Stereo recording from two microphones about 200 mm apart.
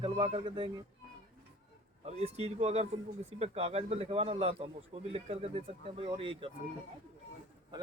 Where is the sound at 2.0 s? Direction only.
30° right (ahead or behind).